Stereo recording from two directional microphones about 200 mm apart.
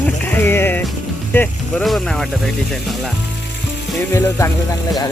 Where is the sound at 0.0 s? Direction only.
10° left (ahead or behind).